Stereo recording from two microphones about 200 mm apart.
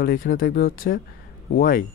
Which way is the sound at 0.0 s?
45° left (ahead or behind).